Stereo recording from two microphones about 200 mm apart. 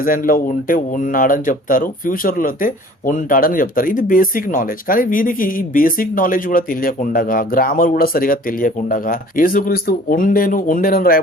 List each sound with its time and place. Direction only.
0.0 s speech: 45° left (ahead or behind)